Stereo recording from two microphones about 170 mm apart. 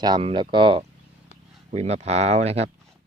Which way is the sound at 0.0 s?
30° right (ahead or behind).